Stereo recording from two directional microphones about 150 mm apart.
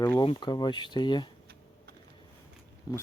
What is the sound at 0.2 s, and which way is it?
Speech, 30° left (ahead or behind).